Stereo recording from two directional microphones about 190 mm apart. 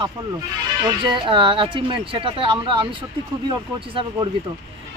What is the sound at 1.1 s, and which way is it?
Speech, 25° right (ahead or behind).